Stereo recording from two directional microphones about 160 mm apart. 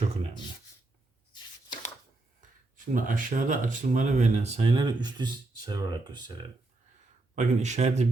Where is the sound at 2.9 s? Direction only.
55° right (ahead or behind).